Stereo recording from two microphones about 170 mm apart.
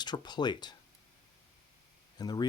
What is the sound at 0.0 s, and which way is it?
Speech, 25° left (ahead or behind).